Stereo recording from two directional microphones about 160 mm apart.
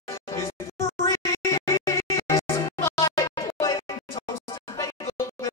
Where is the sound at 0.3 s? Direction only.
20° left (ahead or behind).